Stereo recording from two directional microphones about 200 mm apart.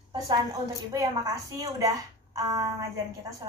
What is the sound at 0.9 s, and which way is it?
Speech, 20° right (ahead or behind).